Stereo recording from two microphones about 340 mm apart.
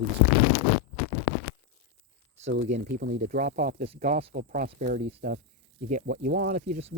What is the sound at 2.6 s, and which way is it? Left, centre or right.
Speech, right.